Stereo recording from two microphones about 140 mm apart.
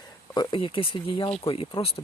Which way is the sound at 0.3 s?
35° left (ahead or behind).